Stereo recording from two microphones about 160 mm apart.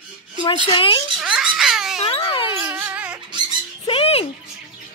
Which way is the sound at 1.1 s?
5° right (ahead or behind).